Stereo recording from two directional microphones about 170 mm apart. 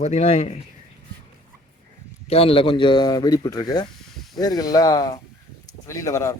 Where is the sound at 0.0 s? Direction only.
40° left (ahead or behind).